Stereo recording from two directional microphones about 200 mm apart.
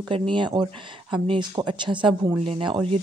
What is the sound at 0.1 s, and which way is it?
A woman's voice, 25° right (ahead or behind).